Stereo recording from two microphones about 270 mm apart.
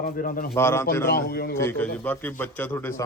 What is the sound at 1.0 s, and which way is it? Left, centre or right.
Speech, left.